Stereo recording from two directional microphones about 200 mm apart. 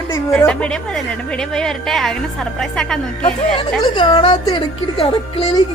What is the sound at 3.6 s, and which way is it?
Speech, 25° left (ahead or behind).